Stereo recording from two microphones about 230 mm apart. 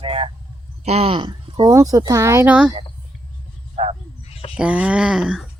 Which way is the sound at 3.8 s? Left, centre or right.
Right.